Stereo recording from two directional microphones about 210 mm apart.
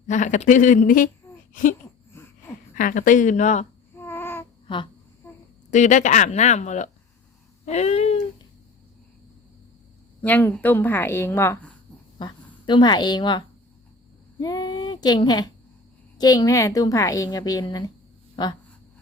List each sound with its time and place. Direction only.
0.1 s speech: 35° left (ahead or behind)
2.1 s a sound: 10° left (ahead or behind)
2.7 s speech: 40° left (ahead or behind)
3.9 s babbling: 10° left (ahead or behind)
4.7 s speech: 20° left (ahead or behind)
5.7 s speech: 35° left (ahead or behind)
7.6 s a sound: 30° left (ahead or behind)
10.2 s a woman's voice: 10° left (ahead or behind)
12.2 s speech: 20° left (ahead or behind)
14.3 s a sound: 20° left (ahead or behind)
16.1 s a woman's voice: 20° left (ahead or behind)